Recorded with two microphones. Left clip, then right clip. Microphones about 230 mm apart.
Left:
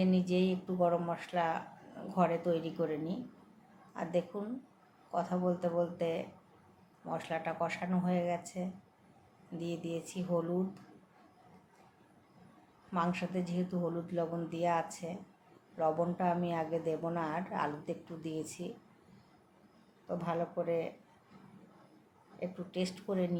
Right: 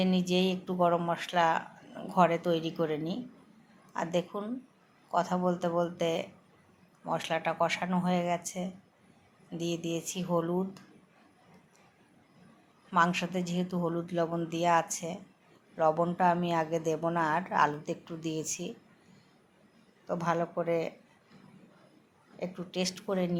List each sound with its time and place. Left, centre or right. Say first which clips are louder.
0.0 s a woman's voice: right 3 dB; centre
12.9 s a woman's voice: right 8 dB; centre
20.1 s a woman's voice: right 5 dB; centre
22.4 s a woman's voice: right 3 dB; centre